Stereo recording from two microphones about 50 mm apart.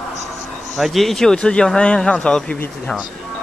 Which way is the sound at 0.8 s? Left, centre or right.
Centre.